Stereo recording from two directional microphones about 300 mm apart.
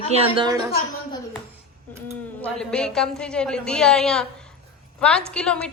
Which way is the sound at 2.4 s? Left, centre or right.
Centre.